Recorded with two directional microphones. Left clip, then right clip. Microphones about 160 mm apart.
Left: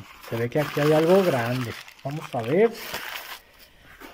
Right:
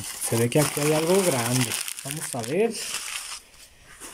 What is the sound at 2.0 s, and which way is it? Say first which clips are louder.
Speech: left 3 dB; 40° right (ahead or behind).